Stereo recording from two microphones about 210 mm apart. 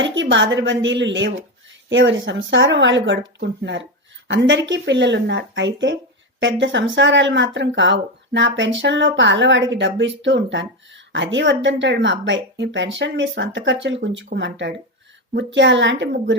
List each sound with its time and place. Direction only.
0.0 s a woman's voice: 60° right (ahead or behind)